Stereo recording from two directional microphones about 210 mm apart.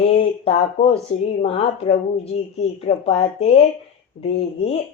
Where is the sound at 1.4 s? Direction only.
30° left (ahead or behind).